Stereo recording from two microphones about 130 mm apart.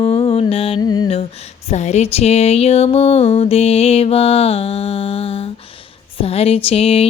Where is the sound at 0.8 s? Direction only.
30° left (ahead or behind).